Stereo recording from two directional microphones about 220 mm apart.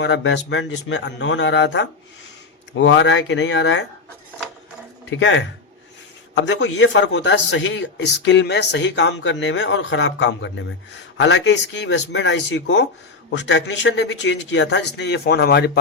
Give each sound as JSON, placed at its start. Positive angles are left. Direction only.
{"t": 0.0, "sound": "a man's voice", "side_deg": 55}
{"t": 5.1, "sound": "a man's voice", "side_deg": 55}